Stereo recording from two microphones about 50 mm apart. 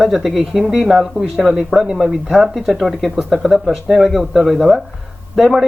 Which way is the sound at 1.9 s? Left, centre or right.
Centre.